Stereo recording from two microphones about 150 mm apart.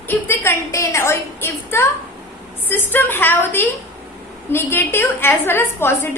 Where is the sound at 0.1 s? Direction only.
15° left (ahead or behind).